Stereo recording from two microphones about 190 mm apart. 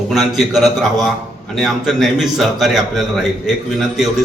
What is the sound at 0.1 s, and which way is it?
A man's voice, centre (ahead or behind).